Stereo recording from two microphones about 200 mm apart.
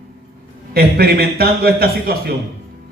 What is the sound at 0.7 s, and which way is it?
A man's voice, 50° right (ahead or behind).